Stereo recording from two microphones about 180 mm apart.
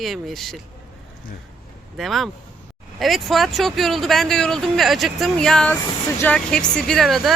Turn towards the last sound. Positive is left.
turn(degrees=0)  # may be behind; listen again after turning